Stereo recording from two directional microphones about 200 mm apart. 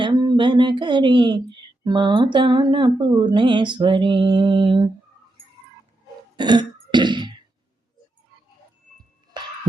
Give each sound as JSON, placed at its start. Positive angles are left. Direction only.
{"t": 0.0, "sound": "speech", "side_deg": -20}
{"t": 6.3, "sound": "cough", "side_deg": -20}